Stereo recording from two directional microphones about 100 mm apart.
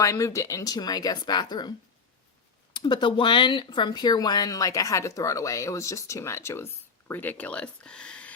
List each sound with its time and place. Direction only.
0.0 s speech: 30° left (ahead or behind)
2.7 s speech: 50° left (ahead or behind); by 8.4 s 10° left (ahead or behind)